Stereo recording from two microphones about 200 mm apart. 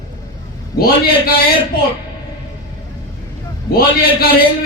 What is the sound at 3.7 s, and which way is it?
Speech, 50° left (ahead or behind).